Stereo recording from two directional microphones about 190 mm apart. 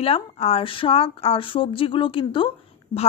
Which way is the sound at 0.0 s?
30° left (ahead or behind).